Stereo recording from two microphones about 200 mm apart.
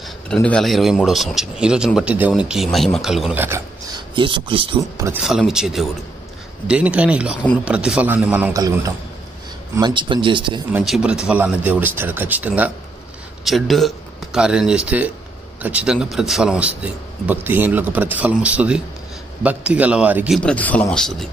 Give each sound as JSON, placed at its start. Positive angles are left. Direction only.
{"t": 0.0, "sound": "a man's voice", "side_deg": 5}
{"t": 4.1, "sound": "speech", "side_deg": -25}
{"t": 5.0, "sound": "a man's voice", "side_deg": -5}
{"t": 8.5, "sound": "speech", "side_deg": -15}
{"t": 10.7, "sound": "speech", "side_deg": -5}
{"t": 20.4, "sound": "a man's voice", "side_deg": 5}